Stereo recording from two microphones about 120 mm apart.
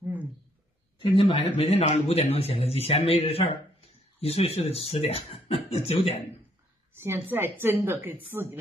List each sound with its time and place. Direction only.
0.9 s a man's voice: 45° left (ahead or behind)
1.6 s a man's voice: 60° left (ahead or behind)
7.0 s a woman's voice: 20° right (ahead or behind)